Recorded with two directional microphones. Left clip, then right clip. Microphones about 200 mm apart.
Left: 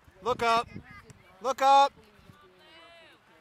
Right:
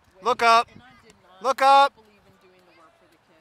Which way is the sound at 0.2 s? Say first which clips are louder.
Right 7 dB; 20° right (ahead or behind).